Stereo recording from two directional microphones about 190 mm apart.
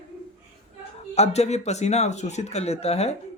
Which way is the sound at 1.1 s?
35° left (ahead or behind).